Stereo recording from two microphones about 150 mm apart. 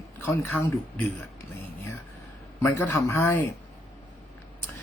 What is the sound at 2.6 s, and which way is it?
Speech, 20° left (ahead or behind).